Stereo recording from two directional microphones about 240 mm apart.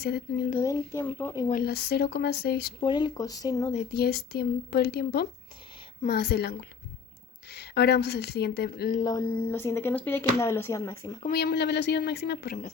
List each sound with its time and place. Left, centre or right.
0.0 s a woman's voice: left
0.5 s speech: centre
1.5 s a woman's voice: left
2.8 s speech: centre
3.8 s a woman's voice: left
9.0 s speech: centre
11.3 s a woman's voice: left